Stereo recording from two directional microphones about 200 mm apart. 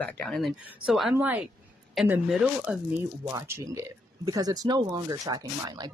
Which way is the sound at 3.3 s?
15° right (ahead or behind).